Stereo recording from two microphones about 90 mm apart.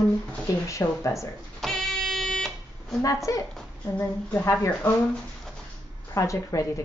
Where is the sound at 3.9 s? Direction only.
30° left (ahead or behind).